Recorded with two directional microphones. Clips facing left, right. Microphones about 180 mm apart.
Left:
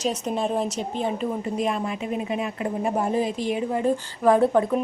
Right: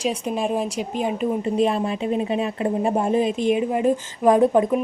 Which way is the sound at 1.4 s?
25° right (ahead or behind).